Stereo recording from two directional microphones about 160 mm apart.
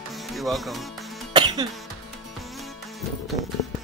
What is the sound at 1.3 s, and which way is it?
Music, 30° right (ahead or behind).